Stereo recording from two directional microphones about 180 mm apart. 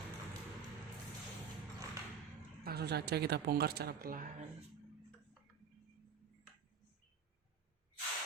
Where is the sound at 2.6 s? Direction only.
60° right (ahead or behind).